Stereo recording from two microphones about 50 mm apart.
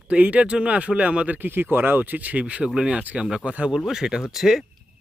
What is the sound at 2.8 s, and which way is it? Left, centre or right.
Speech, centre.